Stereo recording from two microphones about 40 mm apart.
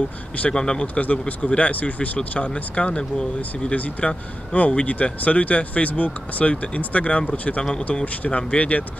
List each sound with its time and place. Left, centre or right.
0.5 s speech: left
0.9 s speech: left
4.0 s speech: left
8.4 s speech: left